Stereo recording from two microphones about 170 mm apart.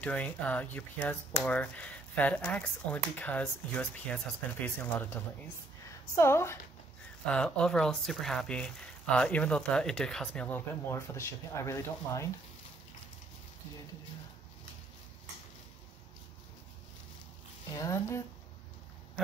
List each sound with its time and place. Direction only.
0.0 s speech: 5° left (ahead or behind)
17.7 s speech: 20° left (ahead or behind)